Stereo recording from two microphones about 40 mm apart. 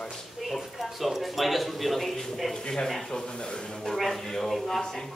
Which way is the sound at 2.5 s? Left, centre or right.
Centre.